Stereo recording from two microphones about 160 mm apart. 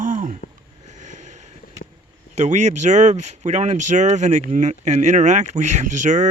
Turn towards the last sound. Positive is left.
turn(degrees=-50)  # may be behind; listen again after turning